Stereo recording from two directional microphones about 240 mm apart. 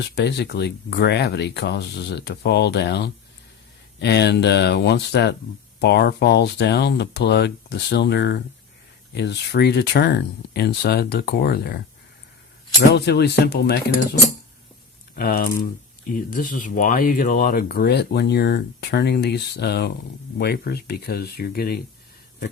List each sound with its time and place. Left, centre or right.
0.0 s speech: left
12.9 s speech: left